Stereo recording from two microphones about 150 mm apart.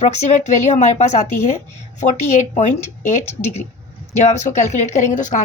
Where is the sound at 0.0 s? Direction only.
50° left (ahead or behind).